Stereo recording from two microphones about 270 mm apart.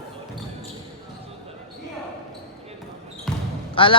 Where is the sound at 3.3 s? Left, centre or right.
Centre.